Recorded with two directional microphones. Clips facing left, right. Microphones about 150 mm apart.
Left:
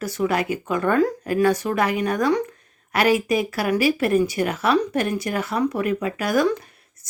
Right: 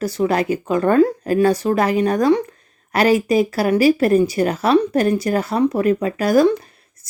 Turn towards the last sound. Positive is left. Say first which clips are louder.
# right 6 dB
turn(degrees=-35)  # may be behind; listen again after turning